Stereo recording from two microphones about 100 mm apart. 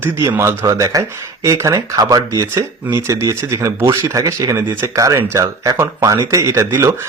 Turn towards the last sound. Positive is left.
turn(degrees=-30)  # may be behind; listen again after turning